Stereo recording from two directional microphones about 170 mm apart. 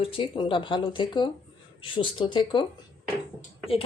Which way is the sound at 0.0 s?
30° left (ahead or behind).